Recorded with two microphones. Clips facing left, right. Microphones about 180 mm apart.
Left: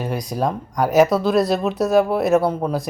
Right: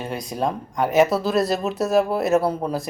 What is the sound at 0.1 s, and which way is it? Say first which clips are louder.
Speech: even; centre (ahead or behind).